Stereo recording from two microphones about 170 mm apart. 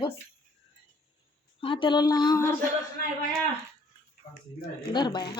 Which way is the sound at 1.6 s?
30° left (ahead or behind).